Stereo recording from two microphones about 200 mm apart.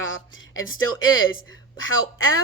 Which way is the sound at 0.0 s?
80° left.